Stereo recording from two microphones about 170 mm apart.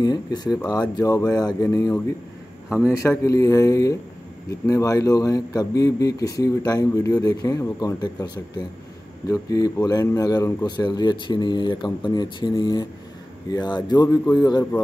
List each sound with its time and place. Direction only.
0.0 s speech: 25° left (ahead or behind)
3.0 s speech: 15° left (ahead or behind)
9.3 s speech: 20° left (ahead or behind)